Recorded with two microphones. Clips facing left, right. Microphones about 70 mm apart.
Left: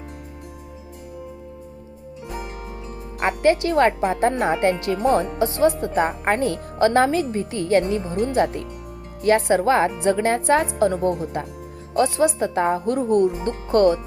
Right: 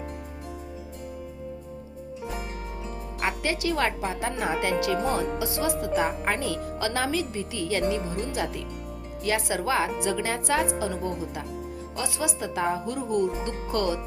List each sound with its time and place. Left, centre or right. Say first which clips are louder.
3.2 s speech: left 10 dB; left